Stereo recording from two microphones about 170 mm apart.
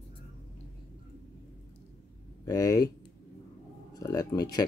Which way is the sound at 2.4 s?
20° left (ahead or behind).